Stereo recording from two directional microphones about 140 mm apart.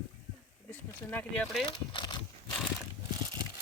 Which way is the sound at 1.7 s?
35° left (ahead or behind).